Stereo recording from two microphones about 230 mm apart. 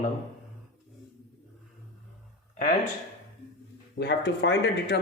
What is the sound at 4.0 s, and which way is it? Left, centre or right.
Speech, left.